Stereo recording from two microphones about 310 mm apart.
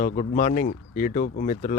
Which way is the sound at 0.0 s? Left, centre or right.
Left.